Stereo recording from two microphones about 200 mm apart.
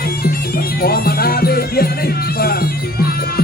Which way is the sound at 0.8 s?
50° left (ahead or behind).